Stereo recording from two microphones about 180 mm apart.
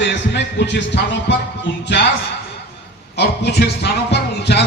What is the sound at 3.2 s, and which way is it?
A man's voice, 65° left (ahead or behind).